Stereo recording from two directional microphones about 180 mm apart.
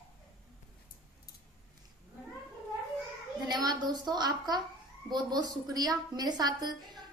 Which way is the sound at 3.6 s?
20° right (ahead or behind).